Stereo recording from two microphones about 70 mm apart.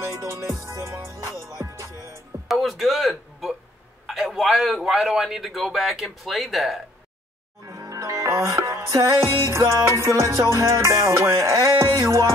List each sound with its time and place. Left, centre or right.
0.0 s music: right
2.4 s music: centre
4.1 s a man's voice: centre
7.6 s music: right